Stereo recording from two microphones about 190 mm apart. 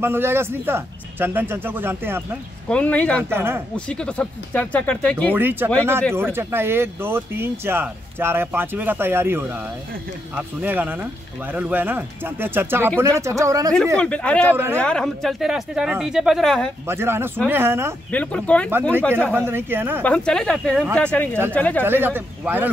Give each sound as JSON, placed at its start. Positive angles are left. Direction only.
{"t": 0.0, "sound": "speech", "side_deg": -10}
{"t": 2.7, "sound": "speech", "side_deg": 5}
{"t": 3.3, "sound": "speech", "side_deg": -10}
{"t": 3.7, "sound": "speech", "side_deg": 5}
{"t": 5.3, "sound": "speech", "side_deg": -10}
{"t": 13.9, "sound": "speech", "side_deg": 5}
{"t": 14.5, "sound": "speech", "side_deg": -10}
{"t": 14.8, "sound": "speech", "side_deg": 5}
{"t": 16.8, "sound": "speech", "side_deg": -10}
{"t": 18.1, "sound": "speech", "side_deg": 5}
{"t": 19.3, "sound": "speech", "side_deg": -10}
{"t": 20.0, "sound": "speech", "side_deg": 5}
{"t": 21.8, "sound": "speech", "side_deg": -10}